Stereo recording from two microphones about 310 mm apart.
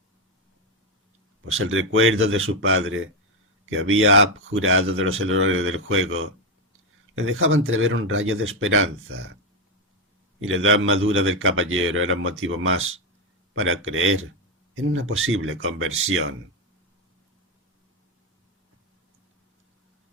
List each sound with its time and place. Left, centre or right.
1.5 s speech: right
10.4 s speech: right